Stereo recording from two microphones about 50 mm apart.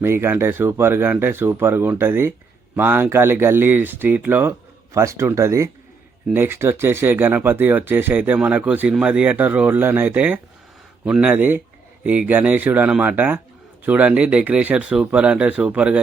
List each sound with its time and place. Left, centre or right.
0.0 s speech: right
4.9 s speech: right
6.3 s speech: right
8.9 s a man's voice: right
9.2 s a man's voice: right